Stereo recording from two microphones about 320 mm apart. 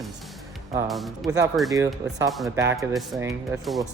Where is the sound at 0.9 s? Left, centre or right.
Centre.